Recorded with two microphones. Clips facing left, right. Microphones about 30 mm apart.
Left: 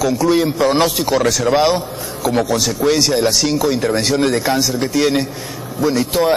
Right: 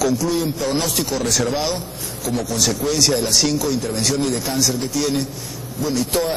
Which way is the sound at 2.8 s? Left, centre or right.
Left.